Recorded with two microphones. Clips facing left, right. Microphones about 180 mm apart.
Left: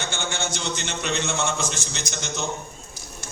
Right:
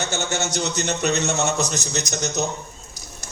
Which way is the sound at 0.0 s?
40° right (ahead or behind).